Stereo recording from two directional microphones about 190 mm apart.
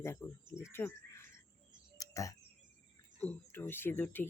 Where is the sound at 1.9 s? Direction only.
15° left (ahead or behind).